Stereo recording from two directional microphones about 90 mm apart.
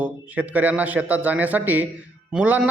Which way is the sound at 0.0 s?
20° right (ahead or behind).